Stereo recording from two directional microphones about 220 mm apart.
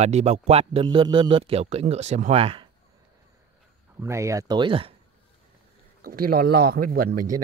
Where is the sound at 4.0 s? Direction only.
15° right (ahead or behind).